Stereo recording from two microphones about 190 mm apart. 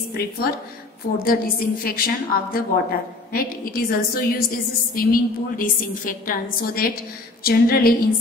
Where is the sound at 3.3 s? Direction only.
50° left (ahead or behind).